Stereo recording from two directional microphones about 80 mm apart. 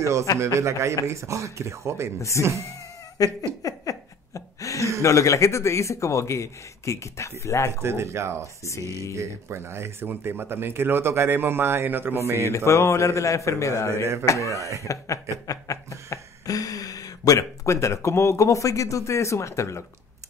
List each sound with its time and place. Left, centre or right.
0.0 s speech: right
2.4 s a man's voice: left
3.2 s laughter: left
3.6 s a sound: left
5.0 s a man's voice: left
7.8 s speech: right
12.4 s a man's voice: left
14.6 s speech: right
15.4 s speech: left